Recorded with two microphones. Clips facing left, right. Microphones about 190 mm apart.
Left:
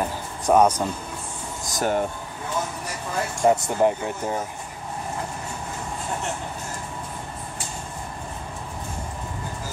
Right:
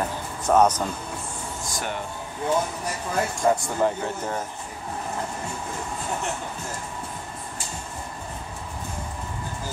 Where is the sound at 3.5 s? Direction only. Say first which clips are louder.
Left 3 dB; 20° left (ahead or behind).